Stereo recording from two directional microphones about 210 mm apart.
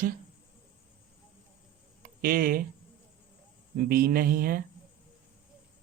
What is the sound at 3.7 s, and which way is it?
Speech, 45° right (ahead or behind).